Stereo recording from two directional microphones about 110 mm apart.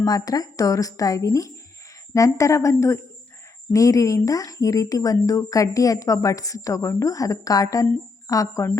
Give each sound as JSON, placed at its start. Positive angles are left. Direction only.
{"t": 0.0, "sound": "a woman's voice", "side_deg": 35}